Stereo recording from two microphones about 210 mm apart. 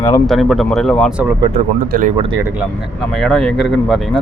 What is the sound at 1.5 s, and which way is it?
Speech, 35° right (ahead or behind).